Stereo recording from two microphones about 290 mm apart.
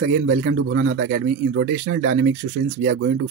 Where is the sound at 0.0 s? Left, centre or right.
Right.